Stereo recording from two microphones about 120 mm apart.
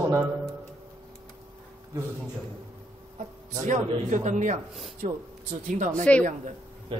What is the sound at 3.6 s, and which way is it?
A man's voice, 85° right.